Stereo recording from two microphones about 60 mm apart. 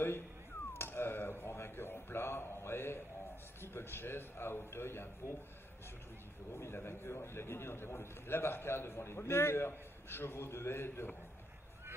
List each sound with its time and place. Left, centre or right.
0.7 s a sound: left
3.6 s a man's voice: left
6.5 s a man's voice: left